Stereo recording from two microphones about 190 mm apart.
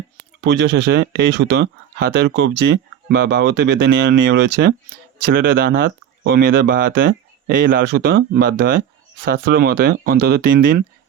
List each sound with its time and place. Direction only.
0.4 s speech: 65° right (ahead or behind); by 10.8 s 50° right (ahead or behind)